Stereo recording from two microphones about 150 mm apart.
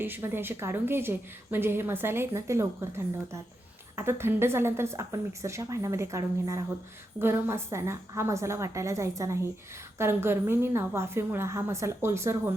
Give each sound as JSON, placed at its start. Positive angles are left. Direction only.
{"t": 0.0, "sound": "a woman's voice", "side_deg": -15}